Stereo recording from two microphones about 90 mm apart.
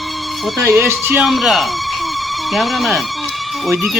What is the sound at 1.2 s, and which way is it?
Speech, centre (ahead or behind).